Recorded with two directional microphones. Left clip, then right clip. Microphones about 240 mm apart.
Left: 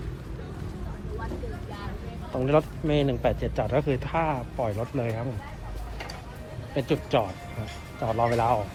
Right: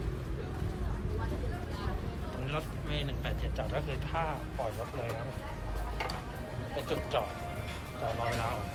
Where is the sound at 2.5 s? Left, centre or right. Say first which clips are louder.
Left 15 dB; centre.